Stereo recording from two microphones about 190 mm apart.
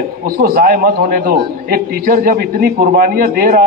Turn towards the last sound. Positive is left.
turn(degrees=-50)  # may be behind; listen again after turning